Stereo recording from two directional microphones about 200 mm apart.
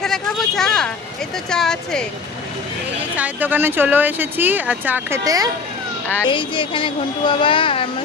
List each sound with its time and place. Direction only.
0.0 s a sound: centre (ahead or behind)
1.5 s speech: 5° left (ahead or behind)
3.2 s speech: 10° right (ahead or behind)
6.2 s speech: 25° left (ahead or behind)